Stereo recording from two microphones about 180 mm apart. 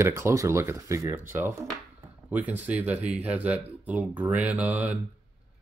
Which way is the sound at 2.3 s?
10° right (ahead or behind).